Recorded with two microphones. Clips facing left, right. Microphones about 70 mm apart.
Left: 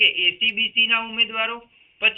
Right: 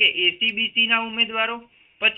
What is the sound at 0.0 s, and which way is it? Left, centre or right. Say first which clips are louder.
A woman's voice: even; centre.